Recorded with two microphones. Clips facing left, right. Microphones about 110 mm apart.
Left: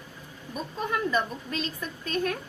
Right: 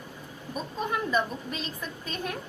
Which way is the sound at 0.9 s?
15° right (ahead or behind).